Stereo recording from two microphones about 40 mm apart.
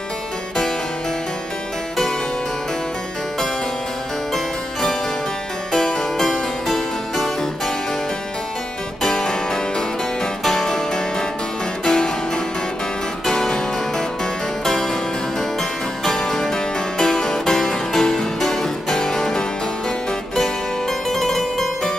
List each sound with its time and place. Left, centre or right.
5.7 s harpsichord: centre
9.1 s music: centre
13.2 s music: centre
14.6 s harpsichord: centre
16.3 s music: centre
21.1 s harpsichord: centre